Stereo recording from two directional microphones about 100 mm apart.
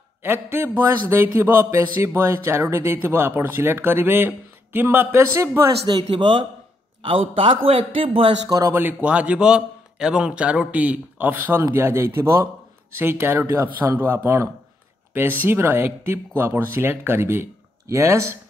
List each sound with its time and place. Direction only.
0.2 s a sound: 20° right (ahead or behind)
5.9 s speech: 50° right (ahead or behind)
7.0 s a man's voice: 65° right (ahead or behind)
8.5 s speech: 35° right (ahead or behind)
8.7 s a man's voice: 15° right (ahead or behind)
11.7 s a sound: 25° right (ahead or behind)